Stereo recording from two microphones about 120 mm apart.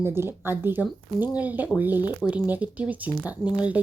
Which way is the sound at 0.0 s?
20° right (ahead or behind).